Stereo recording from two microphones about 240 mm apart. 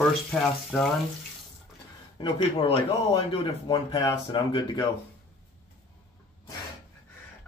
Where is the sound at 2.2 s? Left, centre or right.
Left.